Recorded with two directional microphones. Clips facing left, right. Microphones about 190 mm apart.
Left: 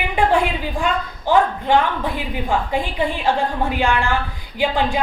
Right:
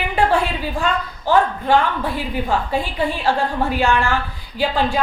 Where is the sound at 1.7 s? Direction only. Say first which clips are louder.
Even; 15° left (ahead or behind).